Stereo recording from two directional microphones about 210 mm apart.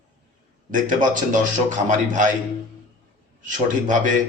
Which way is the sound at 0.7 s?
40° right (ahead or behind).